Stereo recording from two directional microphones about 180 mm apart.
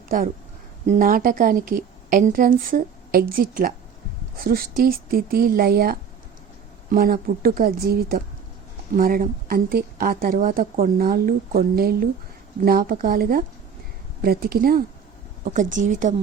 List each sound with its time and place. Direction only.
0.9 s a woman's voice: 50° right (ahead or behind)